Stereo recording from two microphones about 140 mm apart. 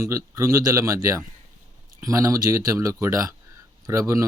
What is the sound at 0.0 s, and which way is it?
Speech, 20° right (ahead or behind).